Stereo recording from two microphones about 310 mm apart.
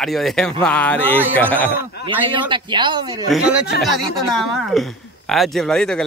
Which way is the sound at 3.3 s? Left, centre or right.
Centre.